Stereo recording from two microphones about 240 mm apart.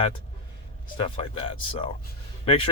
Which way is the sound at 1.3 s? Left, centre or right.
Left.